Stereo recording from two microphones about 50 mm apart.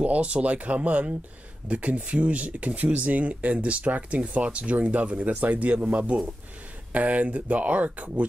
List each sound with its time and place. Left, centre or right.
0.0 s speech: right